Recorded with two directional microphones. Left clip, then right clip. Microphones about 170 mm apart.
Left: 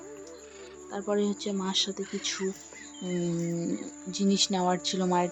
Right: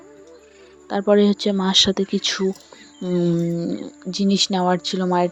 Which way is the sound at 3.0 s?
35° right (ahead or behind).